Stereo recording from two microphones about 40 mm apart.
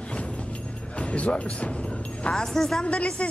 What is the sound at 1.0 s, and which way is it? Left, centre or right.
Speech, left.